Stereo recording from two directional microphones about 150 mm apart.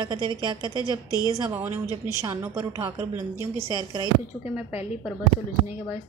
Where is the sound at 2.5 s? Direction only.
30° right (ahead or behind).